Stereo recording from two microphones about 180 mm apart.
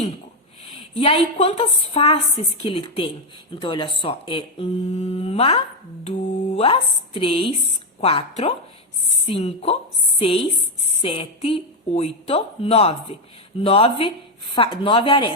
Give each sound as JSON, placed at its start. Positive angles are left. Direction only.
{"t": 0.6, "sound": "a woman's voice", "side_deg": 30}